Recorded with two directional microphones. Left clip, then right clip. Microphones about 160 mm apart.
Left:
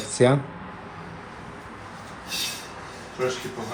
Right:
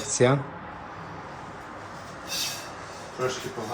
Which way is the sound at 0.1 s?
20° right (ahead or behind).